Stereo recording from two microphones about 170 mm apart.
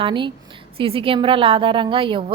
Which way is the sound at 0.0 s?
30° right (ahead or behind).